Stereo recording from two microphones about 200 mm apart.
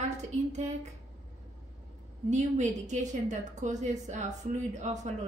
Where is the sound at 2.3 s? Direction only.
35° right (ahead or behind).